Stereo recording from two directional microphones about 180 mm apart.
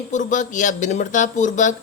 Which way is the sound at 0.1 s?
45° left (ahead or behind).